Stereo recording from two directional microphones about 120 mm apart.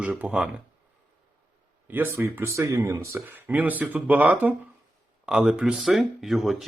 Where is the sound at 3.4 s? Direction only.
15° right (ahead or behind).